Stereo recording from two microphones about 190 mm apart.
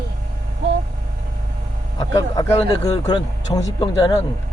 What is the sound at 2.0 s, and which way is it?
Speech, 20° left (ahead or behind).